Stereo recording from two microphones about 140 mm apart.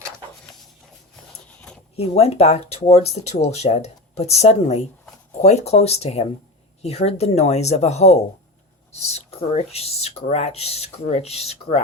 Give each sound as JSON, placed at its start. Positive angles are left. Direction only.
{"t": 2.0, "sound": "speech", "side_deg": 45}